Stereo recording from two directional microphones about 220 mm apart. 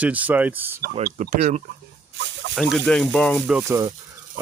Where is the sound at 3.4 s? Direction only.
10° right (ahead or behind).